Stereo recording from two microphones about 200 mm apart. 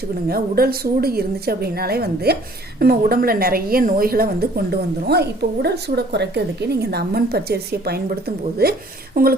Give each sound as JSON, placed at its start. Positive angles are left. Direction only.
{"t": 0.3, "sound": "a woman's voice", "side_deg": -50}